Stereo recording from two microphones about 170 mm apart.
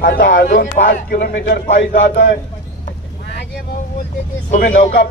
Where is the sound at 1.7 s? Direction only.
90° left.